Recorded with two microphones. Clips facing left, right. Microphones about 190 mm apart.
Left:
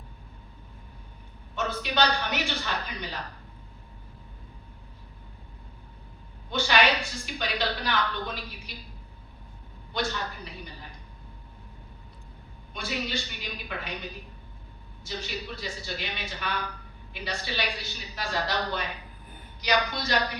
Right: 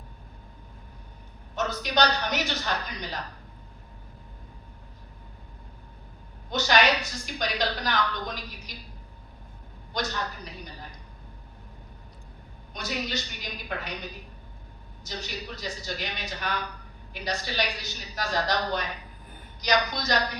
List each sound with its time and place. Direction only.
1.7 s a woman's voice: 40° right (ahead or behind)
6.5 s a woman's voice: 40° right (ahead or behind)
9.9 s a woman's voice: 40° right (ahead or behind)
12.7 s a woman's voice: 40° right (ahead or behind)
19.9 s a woman's voice: 40° right (ahead or behind)